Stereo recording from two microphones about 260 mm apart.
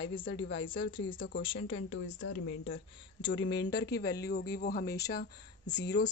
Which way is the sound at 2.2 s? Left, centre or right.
Left.